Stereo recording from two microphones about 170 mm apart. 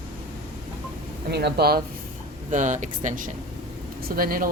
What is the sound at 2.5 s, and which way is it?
Speech, 45° right (ahead or behind).